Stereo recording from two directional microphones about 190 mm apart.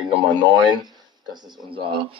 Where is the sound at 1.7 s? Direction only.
25° right (ahead or behind).